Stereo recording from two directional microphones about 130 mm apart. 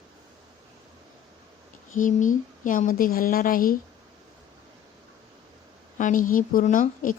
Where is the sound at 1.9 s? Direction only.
85° left.